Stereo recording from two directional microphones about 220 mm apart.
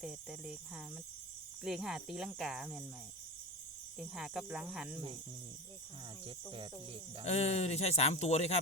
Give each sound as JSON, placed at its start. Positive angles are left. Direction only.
{"t": 0.0, "sound": "speech", "side_deg": 0}
{"t": 3.9, "sound": "speech", "side_deg": 0}
{"t": 6.2, "sound": "speech", "side_deg": -25}
{"t": 7.3, "sound": "a man's voice", "side_deg": 30}